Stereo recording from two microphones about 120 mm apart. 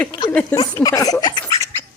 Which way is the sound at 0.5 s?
30° left (ahead or behind).